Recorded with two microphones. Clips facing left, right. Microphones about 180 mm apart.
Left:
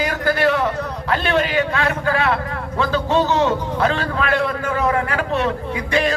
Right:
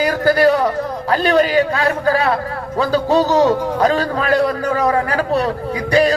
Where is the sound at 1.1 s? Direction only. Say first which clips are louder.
Right 5 dB; 35° right (ahead or behind).